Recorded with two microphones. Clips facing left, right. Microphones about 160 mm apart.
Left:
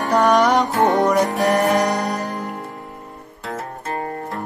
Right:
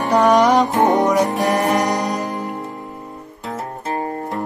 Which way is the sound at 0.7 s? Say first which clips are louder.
Right 1 dB; 20° right (ahead or behind).